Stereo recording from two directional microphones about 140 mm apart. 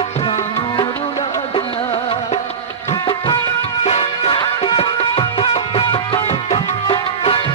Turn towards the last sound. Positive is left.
turn(degrees=40)  # may be behind; listen again after turning